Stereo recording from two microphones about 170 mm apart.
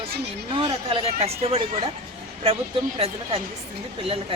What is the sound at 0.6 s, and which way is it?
Speech, 30° right (ahead or behind).